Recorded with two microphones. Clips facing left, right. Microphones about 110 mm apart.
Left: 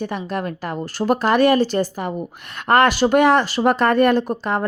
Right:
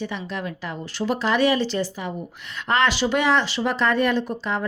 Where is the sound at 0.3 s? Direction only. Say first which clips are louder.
Left 5 dB; 50° left (ahead or behind).